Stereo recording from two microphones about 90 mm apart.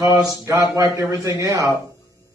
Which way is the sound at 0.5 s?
35° right (ahead or behind).